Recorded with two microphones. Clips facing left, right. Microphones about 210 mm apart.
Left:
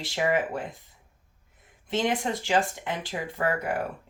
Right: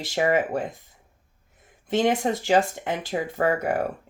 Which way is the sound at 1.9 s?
45° right (ahead or behind).